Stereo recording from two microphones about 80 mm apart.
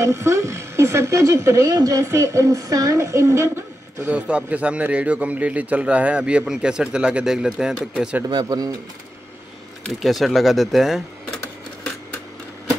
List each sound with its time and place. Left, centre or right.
0.0 s speech: right
1.7 s speech: right
4.1 s a man's voice: centre
8.3 s speech: right
9.8 s speech: centre